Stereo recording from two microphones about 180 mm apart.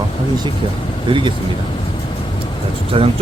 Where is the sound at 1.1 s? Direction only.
25° right (ahead or behind).